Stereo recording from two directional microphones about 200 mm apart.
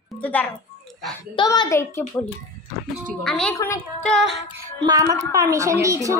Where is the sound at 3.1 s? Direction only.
5° left (ahead or behind).